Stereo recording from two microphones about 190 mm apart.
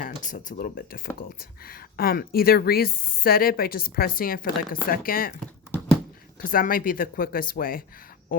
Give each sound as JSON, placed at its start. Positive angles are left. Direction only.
{"t": 0.3, "sound": "speech", "side_deg": 45}
{"t": 6.4, "sound": "speech", "side_deg": 50}